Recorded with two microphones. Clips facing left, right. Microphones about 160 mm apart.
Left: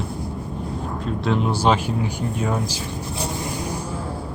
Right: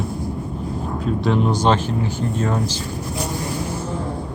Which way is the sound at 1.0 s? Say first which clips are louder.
Right 3 dB; centre (ahead or behind).